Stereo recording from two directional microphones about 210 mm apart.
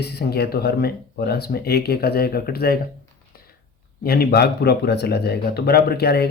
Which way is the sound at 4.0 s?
45° left (ahead or behind).